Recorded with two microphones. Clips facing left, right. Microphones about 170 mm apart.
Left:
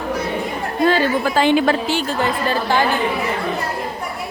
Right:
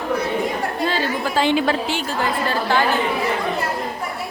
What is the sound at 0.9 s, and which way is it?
Speech, 50° left (ahead or behind).